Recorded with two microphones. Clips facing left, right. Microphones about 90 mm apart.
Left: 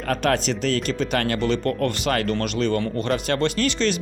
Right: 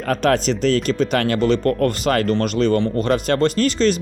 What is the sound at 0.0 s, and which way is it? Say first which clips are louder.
Speech: right 4 dB; 40° right (ahead or behind).